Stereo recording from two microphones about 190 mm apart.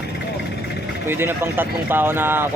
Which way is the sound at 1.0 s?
10° right (ahead or behind).